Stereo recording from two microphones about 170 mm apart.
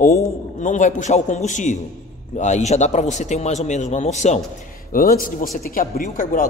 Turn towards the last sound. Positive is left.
turn(degrees=50)  # may be behind; listen again after turning